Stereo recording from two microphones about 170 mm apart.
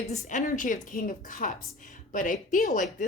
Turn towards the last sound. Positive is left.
turn(degrees=50)  # may be behind; listen again after turning